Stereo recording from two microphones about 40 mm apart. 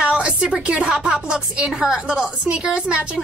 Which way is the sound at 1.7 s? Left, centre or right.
Centre.